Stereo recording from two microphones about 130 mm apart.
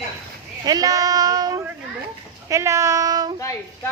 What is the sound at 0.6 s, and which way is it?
Speech, 30° right (ahead or behind).